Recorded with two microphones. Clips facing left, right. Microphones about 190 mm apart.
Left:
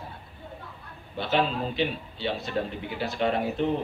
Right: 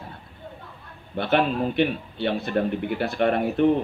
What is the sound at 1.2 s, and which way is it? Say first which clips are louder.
A man's voice: right 4 dB; 60° right (ahead or behind).